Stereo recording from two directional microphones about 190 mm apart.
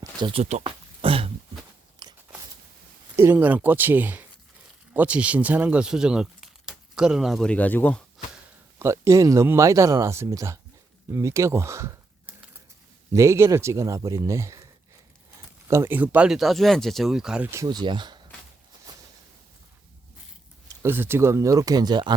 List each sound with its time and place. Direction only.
0.0 s a sound: 25° right (ahead or behind)
2.0 s biting: 20° right (ahead or behind)
3.2 s speech: 10° right (ahead or behind); by 8.0 s 10° left (ahead or behind)
8.8 s speech: 15° right (ahead or behind)
13.1 s speech: 15° right (ahead or behind)
20.8 s speech: 10° right (ahead or behind)